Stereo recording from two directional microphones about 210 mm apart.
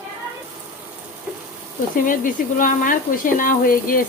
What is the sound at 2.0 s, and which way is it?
Speech, 40° left (ahead or behind).